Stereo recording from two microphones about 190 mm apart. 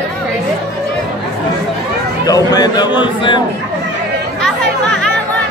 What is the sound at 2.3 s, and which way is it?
A man's voice, 20° left (ahead or behind).